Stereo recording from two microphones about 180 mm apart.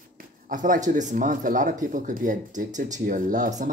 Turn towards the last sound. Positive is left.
turn(degrees=-45)  # may be behind; listen again after turning